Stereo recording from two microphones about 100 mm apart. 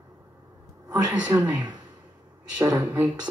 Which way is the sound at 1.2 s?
15° right (ahead or behind).